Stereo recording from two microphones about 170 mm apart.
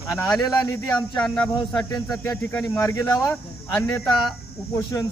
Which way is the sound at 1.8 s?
20° left (ahead or behind).